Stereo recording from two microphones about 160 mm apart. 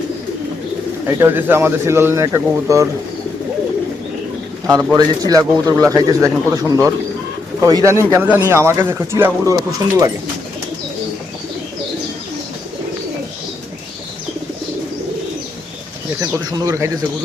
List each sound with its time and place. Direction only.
1.0 s speech: 15° right (ahead or behind)
4.6 s a man's voice: 20° right (ahead or behind)
16.2 s speech: 15° right (ahead or behind)